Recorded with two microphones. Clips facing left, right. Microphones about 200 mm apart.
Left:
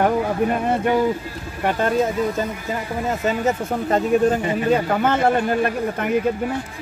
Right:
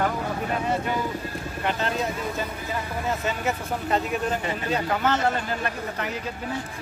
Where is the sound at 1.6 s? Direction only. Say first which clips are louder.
Left 6 dB; 50° left (ahead or behind).